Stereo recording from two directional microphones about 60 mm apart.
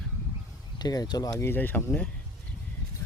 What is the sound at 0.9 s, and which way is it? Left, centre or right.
Speech, left.